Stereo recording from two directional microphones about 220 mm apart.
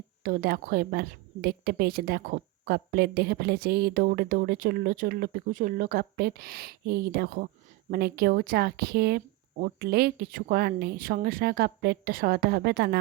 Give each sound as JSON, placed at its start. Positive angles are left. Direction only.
{"t": 0.2, "sound": "a woman's voice", "side_deg": -40}